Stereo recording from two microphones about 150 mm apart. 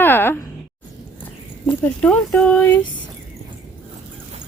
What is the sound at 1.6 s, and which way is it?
Speech, 10° left (ahead or behind).